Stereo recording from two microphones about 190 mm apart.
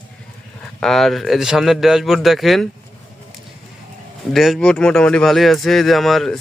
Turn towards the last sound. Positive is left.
turn(degrees=0)  # may be behind; listen again after turning